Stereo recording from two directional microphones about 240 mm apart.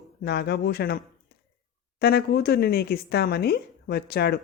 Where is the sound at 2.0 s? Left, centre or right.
Left.